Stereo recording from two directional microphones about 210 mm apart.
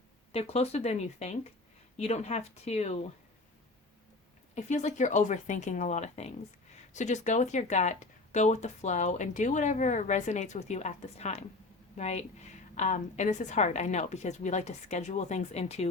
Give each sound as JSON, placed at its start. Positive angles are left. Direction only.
{"t": 0.3, "sound": "speech", "side_deg": 30}
{"t": 4.5, "sound": "speech", "side_deg": 35}